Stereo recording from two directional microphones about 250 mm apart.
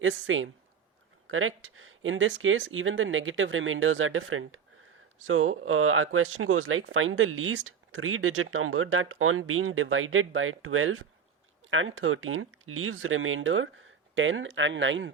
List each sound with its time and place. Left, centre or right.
0.0 s speech: right